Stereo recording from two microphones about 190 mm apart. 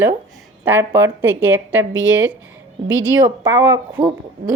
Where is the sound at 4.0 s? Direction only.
30° right (ahead or behind).